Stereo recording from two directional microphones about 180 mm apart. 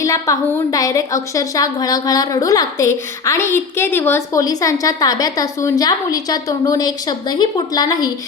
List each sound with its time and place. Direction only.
0.0 s a woman's voice: 20° left (ahead or behind)